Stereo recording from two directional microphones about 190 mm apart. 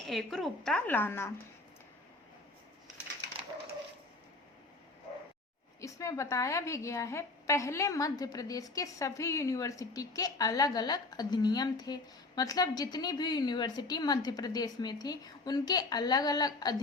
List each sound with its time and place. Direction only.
0.0 s a woman's voice: centre (ahead or behind)
5.8 s a woman's voice: 15° left (ahead or behind)